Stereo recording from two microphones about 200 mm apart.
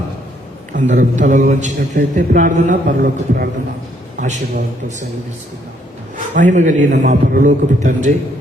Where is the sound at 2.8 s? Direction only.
60° right (ahead or behind).